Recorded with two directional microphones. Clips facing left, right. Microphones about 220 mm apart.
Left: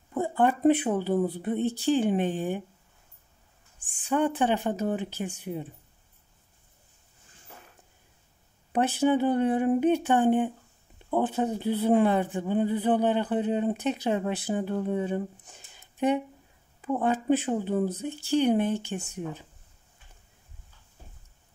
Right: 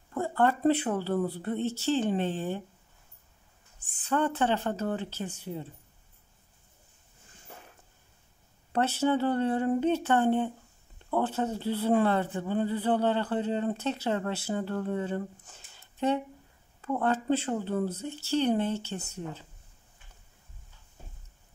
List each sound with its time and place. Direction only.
0.1 s speech: 15° left (ahead or behind)
4.0 s speech: 15° left (ahead or behind)
8.7 s speech: 15° left (ahead or behind)